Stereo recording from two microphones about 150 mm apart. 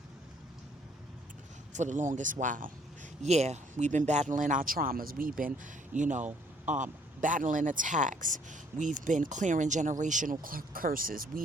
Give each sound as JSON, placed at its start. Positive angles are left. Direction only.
{"t": 1.7, "sound": "speech", "side_deg": -55}
{"t": 3.2, "sound": "speech", "side_deg": -45}
{"t": 6.0, "sound": "speech", "side_deg": -55}
{"t": 10.4, "sound": "speech", "side_deg": -70}